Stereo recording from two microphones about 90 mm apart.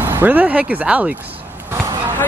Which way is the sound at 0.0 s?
20° right (ahead or behind).